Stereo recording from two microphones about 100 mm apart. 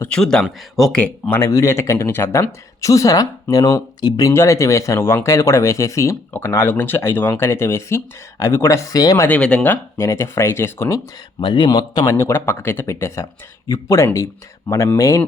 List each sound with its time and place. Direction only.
0.1 s speech: 5° left (ahead or behind)
0.9 s speech: 10° left (ahead or behind)
1.4 s speech: 30° left (ahead or behind)
9.3 s speech: 10° left (ahead or behind)
10.0 s speech: 30° left (ahead or behind)
11.3 s speech: 55° left (ahead or behind)
12.0 s speech: 30° left (ahead or behind)